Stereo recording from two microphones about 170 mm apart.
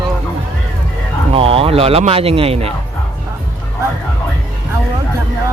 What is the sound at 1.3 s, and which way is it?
Speech, 35° right (ahead or behind).